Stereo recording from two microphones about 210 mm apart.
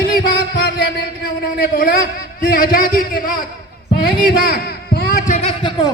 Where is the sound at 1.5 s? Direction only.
45° left (ahead or behind).